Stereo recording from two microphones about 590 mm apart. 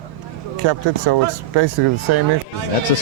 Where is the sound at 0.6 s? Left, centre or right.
Right.